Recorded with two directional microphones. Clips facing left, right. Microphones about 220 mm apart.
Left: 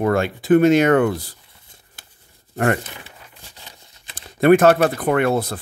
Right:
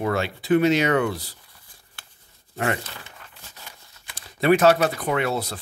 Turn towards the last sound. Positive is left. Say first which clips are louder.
# left 6 dB
turn(degrees=50)  # may be behind; listen again after turning